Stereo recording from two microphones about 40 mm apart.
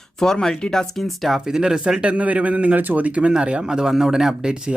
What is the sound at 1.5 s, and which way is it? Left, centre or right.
Speech, centre.